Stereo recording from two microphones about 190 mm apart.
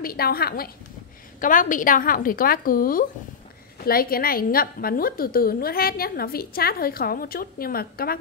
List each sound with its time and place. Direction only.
0.0 s a woman's voice: 50° left (ahead or behind)